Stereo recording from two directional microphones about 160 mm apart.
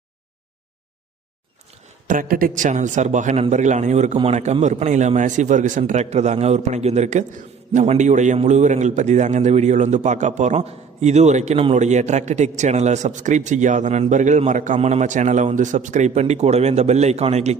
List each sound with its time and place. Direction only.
2.0 s a man's voice: 60° right (ahead or behind); by 17.6 s 45° right (ahead or behind)